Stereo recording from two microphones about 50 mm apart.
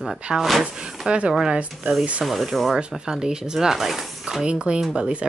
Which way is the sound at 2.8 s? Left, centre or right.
Centre.